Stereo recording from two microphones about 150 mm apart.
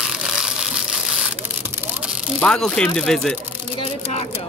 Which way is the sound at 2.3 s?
5° left (ahead or behind).